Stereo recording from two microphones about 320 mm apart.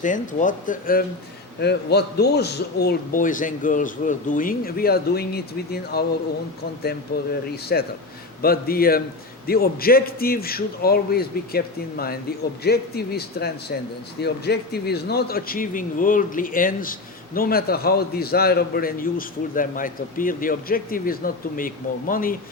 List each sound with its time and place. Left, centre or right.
0.0 s speech: left
7.5 s speech: left